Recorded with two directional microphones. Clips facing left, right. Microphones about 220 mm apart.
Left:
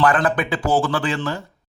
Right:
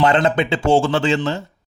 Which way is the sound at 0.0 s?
25° right (ahead or behind).